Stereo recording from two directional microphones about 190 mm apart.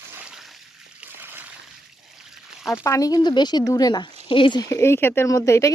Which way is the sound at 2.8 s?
15° left (ahead or behind).